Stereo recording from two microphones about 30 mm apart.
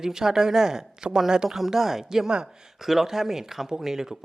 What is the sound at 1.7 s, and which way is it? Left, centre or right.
Speech, centre.